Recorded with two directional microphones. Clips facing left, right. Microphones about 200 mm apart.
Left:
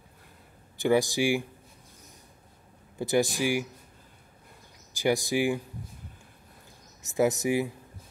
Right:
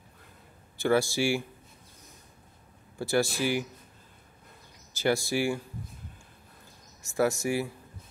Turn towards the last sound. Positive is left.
turn(degrees=20)  # may be behind; listen again after turning